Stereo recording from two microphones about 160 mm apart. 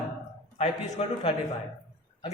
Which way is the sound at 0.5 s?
45° left (ahead or behind).